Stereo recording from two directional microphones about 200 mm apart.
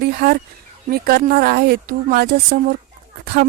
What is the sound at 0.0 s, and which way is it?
Speech, 50° right (ahead or behind).